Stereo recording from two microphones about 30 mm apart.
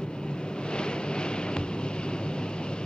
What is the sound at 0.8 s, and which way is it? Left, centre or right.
Vehicle, left.